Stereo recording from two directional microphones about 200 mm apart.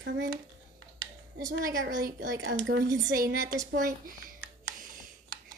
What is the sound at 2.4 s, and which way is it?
Speech, 60° right (ahead or behind).